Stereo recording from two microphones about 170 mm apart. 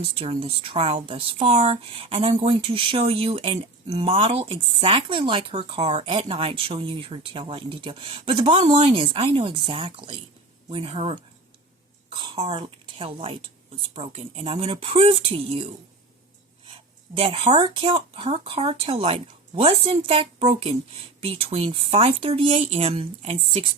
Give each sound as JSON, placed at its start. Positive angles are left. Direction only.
{"t": 0.2, "sound": "speech", "side_deg": -35}
{"t": 17.2, "sound": "speech", "side_deg": -30}